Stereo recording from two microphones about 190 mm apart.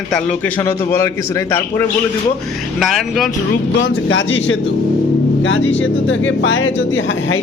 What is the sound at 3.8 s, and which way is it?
Speech, 85° left.